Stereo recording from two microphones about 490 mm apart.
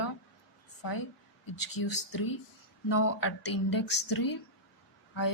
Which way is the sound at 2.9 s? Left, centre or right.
Left.